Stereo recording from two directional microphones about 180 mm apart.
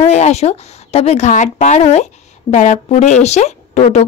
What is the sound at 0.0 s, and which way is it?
A woman's voice, 40° left (ahead or behind).